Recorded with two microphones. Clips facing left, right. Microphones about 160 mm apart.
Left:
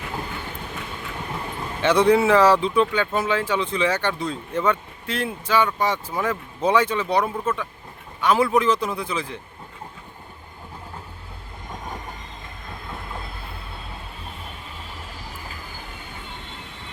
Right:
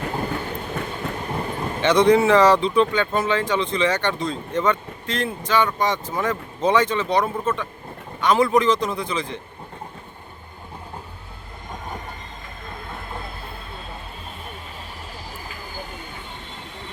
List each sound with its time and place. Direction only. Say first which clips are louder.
0.0 s train: right 5 dB; 45° right (ahead or behind)
1.8 s speech: right 1 dB; 5° left (ahead or behind)